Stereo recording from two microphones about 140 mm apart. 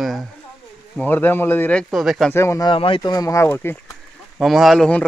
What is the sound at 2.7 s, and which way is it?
Speech, 40° left (ahead or behind).